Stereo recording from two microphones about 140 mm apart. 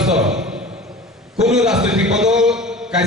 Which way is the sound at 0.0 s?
5° right (ahead or behind).